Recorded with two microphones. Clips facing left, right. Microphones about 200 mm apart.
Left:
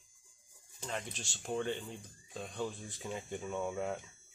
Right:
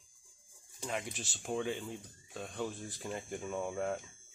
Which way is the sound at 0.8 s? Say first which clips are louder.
Right 2 dB; 10° right (ahead or behind).